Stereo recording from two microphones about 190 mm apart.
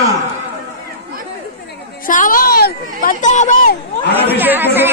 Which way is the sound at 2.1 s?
45° left (ahead or behind).